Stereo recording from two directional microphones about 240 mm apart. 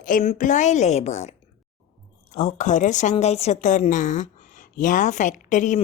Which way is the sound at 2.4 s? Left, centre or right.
Left.